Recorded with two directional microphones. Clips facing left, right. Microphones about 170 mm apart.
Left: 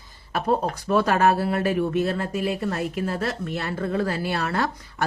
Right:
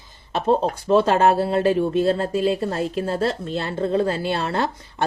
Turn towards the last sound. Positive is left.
turn(degrees=-25)  # may be behind; listen again after turning